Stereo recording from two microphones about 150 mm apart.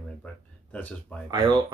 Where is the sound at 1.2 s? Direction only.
25° right (ahead or behind).